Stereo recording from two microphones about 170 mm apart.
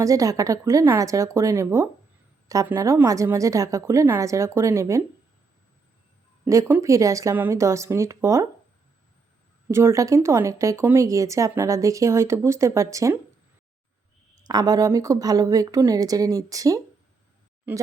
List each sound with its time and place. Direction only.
0.0 s speech: 20° right (ahead or behind)
6.4 s speech: 15° right (ahead or behind)
9.6 s speech: 15° right (ahead or behind)
14.4 s speech: 20° right (ahead or behind)